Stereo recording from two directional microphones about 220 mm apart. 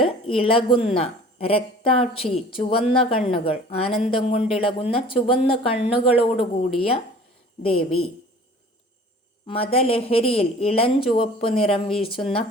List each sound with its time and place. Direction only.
0.0 s a woman's voice: 25° left (ahead or behind)
9.5 s speech: 25° left (ahead or behind)